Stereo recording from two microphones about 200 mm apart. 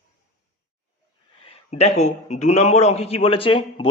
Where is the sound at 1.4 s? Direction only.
30° left (ahead or behind).